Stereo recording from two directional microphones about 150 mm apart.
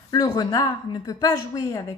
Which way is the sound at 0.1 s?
25° left (ahead or behind).